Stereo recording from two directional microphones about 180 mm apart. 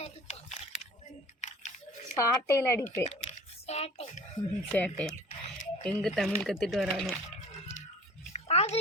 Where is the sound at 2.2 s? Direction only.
15° left (ahead or behind).